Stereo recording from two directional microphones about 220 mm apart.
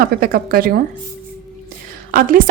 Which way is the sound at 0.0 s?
40° right (ahead or behind).